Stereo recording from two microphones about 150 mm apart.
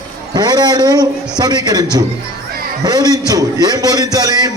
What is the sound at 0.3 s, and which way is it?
A man's voice, 25° right (ahead or behind).